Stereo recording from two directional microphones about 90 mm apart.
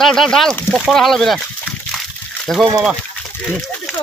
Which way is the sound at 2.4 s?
Centre (ahead or behind).